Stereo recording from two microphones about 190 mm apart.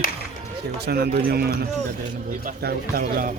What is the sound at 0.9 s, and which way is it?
Speech, 55° right (ahead or behind).